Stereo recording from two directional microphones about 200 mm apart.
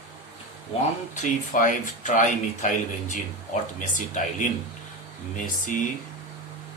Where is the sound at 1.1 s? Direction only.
40° left (ahead or behind).